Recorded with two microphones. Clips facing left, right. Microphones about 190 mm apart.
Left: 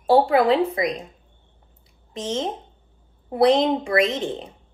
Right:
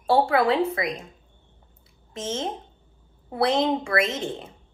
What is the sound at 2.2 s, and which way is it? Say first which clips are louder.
A woman's voice: left 3 dB; 15° left (ahead or behind).